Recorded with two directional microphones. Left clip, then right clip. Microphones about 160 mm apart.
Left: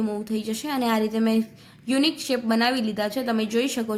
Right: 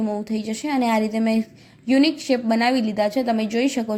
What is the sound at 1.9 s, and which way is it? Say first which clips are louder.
Speech: right 4 dB; 40° left (ahead or behind).